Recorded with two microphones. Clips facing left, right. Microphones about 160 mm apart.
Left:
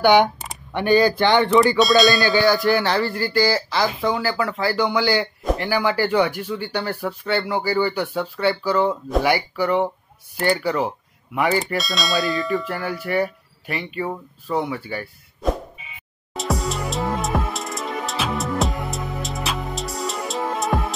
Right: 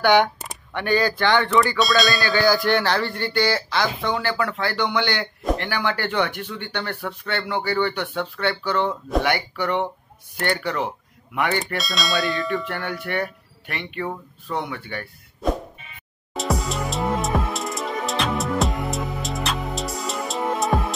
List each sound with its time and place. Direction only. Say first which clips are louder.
0.0 s speech: left 2 dB; 15° left (ahead or behind)
1.8 s speech: left 5 dB; centre (ahead or behind)
11.3 s bell: left 3 dB; centre (ahead or behind)